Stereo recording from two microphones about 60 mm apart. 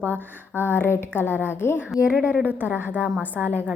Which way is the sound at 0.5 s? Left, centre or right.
Left.